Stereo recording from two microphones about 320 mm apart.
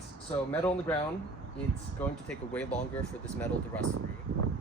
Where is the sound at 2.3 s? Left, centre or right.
Centre.